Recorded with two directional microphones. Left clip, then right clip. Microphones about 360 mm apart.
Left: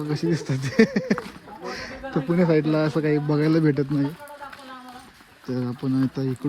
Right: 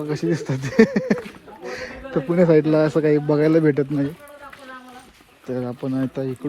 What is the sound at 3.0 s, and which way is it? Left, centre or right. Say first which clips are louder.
Speech: right 5 dB; right.